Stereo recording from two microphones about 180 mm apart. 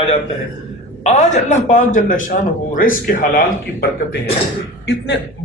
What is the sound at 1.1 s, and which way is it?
A man's voice, 40° left (ahead or behind).